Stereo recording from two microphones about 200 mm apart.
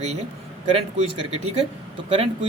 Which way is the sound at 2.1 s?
30° right (ahead or behind).